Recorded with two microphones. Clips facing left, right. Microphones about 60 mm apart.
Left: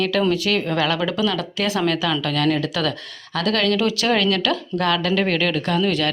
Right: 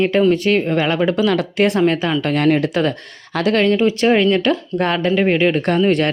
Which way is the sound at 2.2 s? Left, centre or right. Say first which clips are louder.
Right 5 dB; right.